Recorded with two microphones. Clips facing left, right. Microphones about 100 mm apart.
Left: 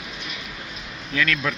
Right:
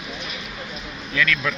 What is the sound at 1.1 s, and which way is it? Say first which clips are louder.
Speech: right 1 dB; 35° left (ahead or behind).